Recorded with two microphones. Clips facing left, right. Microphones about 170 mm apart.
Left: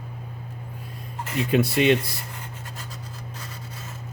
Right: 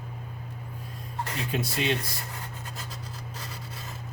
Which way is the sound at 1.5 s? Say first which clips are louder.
Left 10 dB; 65° left (ahead or behind).